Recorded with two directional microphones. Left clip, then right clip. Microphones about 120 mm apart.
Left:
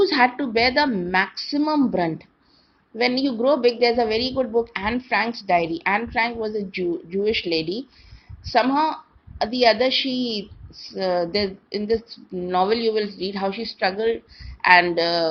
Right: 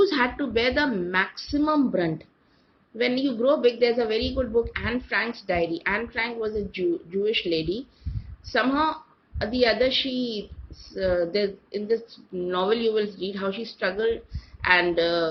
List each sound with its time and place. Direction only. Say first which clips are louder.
0.0 s a woman's voice: left 4 dB; 55° left (ahead or behind)
1.9 s speech: left 3 dB; 65° left (ahead or behind)
3.0 s a woman's voice: left 3 dB; 55° left (ahead or behind)
10.9 s a woman's voice: left 2 dB; 65° left (ahead or behind)
14.6 s a woman's voice: left 5 dB; 70° left (ahead or behind)